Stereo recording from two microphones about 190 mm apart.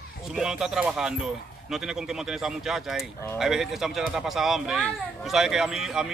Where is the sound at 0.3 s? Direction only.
5° right (ahead or behind).